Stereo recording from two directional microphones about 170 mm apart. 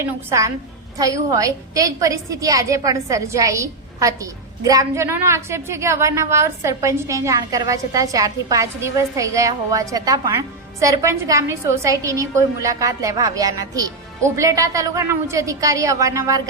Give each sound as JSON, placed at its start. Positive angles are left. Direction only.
{"t": 0.0, "sound": "a woman's voice", "side_deg": -15}